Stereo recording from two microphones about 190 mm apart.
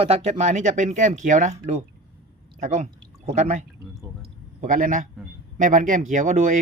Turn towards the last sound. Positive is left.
turn(degrees=-40)  # may be behind; listen again after turning